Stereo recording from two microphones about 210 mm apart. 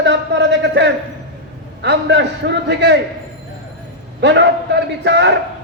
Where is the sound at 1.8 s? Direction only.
55° right (ahead or behind).